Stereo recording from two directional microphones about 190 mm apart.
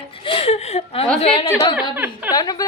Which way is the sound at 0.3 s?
30° left (ahead or behind).